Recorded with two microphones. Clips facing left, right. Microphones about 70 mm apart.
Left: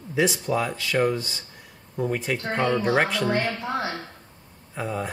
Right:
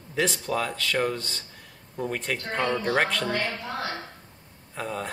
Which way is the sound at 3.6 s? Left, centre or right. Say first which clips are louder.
Left 4 dB; left.